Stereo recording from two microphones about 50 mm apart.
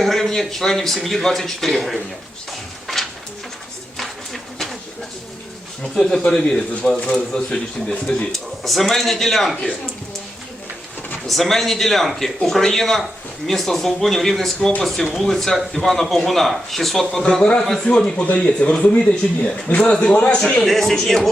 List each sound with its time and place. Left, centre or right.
0.0 s speech: centre
2.8 s a sound: centre
5.8 s speech: centre
11.3 s speech: centre
17.4 s a man's voice: centre
20.7 s speech: centre